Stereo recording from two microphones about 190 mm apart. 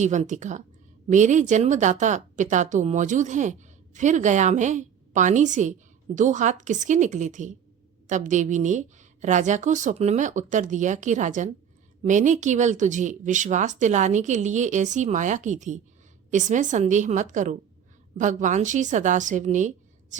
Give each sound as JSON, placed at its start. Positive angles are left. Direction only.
{"t": 0.0, "sound": "a woman's voice", "side_deg": -40}